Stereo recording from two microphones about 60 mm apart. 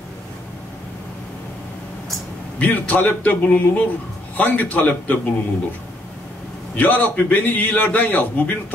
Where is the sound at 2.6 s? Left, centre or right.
Left.